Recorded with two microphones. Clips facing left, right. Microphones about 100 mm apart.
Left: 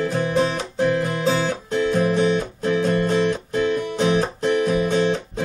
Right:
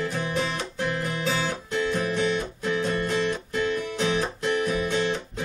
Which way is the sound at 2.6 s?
50° left (ahead or behind).